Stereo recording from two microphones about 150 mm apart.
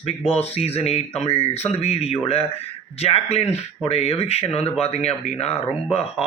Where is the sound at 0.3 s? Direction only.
45° left (ahead or behind).